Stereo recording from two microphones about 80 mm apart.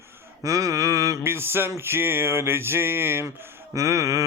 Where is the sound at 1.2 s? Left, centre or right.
Right.